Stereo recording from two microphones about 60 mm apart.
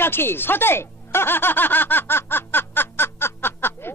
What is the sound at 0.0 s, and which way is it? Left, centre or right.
Speech, left.